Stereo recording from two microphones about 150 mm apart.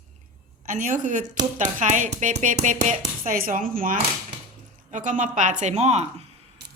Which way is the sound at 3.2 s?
65° right (ahead or behind).